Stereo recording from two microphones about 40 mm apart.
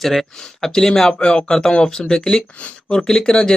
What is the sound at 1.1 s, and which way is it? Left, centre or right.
Speech, left.